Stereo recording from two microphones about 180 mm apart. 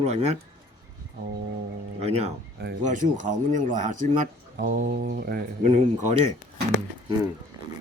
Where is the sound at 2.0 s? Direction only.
35° right (ahead or behind); by 5.4 s 60° right (ahead or behind).